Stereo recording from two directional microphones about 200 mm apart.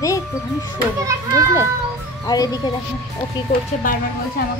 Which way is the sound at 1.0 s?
15° right (ahead or behind).